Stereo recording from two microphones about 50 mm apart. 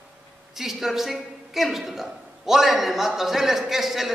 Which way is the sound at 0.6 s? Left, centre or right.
Centre.